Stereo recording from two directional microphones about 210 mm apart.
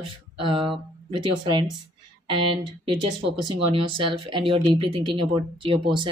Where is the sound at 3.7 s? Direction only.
25° right (ahead or behind).